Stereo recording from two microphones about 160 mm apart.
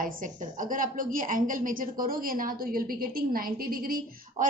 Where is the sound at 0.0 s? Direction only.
55° right (ahead or behind).